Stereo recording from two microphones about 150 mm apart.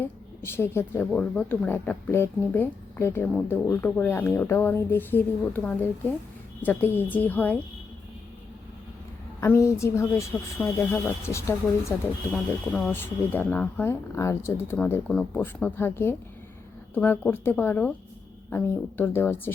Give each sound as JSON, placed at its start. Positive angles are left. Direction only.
{"t": 0.0, "sound": "a woman's voice", "side_deg": 15}
{"t": 9.4, "sound": "a woman's voice", "side_deg": 20}
{"t": 12.3, "sound": "speech", "side_deg": 0}
{"t": 12.9, "sound": "a woman's voice", "side_deg": 15}